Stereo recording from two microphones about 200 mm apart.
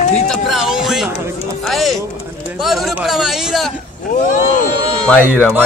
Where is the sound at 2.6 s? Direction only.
Centre (ahead or behind).